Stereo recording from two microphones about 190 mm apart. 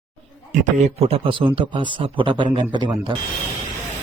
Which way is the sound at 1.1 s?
25° right (ahead or behind).